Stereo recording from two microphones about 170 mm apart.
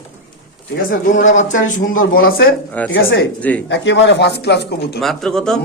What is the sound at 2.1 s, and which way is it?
Speech, 60° left (ahead or behind).